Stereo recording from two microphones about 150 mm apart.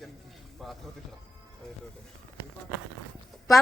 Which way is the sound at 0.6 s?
Centre (ahead or behind).